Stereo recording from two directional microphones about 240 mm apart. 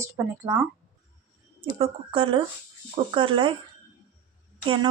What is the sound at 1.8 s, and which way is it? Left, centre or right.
Speech, right.